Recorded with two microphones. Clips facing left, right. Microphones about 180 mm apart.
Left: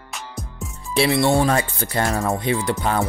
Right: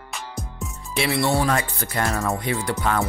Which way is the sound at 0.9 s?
30° left (ahead or behind).